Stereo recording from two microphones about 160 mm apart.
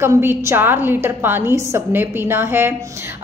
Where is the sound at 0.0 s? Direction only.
15° right (ahead or behind).